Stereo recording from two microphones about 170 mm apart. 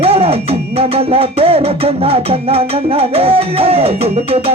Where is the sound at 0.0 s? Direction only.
35° right (ahead or behind).